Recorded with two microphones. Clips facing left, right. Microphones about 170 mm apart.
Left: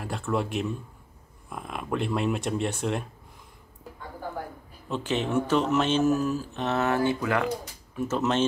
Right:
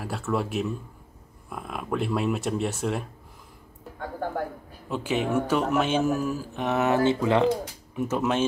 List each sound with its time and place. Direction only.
0.0 s speech: 5° right (ahead or behind)
4.8 s speech: 10° right (ahead or behind)